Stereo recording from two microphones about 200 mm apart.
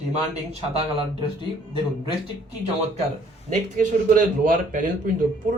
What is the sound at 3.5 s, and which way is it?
A man's voice, 40° right (ahead or behind).